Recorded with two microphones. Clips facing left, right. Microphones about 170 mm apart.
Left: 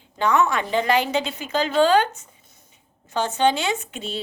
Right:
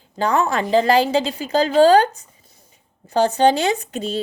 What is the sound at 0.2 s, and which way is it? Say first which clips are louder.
A woman's voice: right 1 dB; 35° right (ahead or behind).